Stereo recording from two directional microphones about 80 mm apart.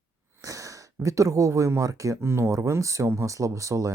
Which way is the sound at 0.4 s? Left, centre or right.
Right.